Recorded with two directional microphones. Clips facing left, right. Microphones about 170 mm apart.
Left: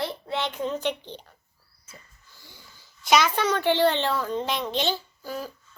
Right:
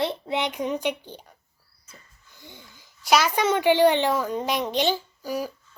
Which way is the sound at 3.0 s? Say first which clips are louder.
Right 1 dB; 5° right (ahead or behind).